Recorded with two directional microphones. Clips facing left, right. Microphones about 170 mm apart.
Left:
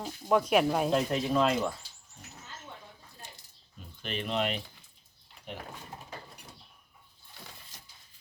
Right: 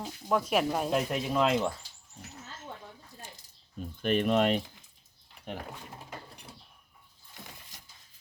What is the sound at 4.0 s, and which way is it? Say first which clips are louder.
Speech: right 7 dB; 50° right (ahead or behind).